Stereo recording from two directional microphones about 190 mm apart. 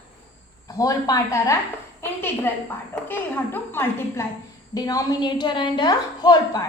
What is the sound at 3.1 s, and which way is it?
A woman's voice, 10° left (ahead or behind).